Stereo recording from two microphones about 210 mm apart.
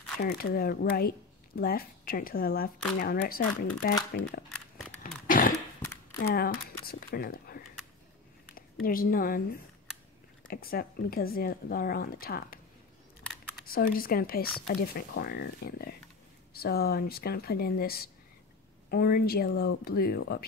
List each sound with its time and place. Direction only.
0.2 s speech: 45° left (ahead or behind)
5.2 s cough: 40° left (ahead or behind)
6.2 s speech: 45° left (ahead or behind)
8.8 s speech: 45° left (ahead or behind)
13.7 s speech: 45° left (ahead or behind)